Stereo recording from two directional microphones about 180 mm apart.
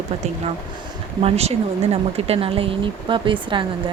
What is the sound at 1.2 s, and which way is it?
Speech, 35° right (ahead or behind).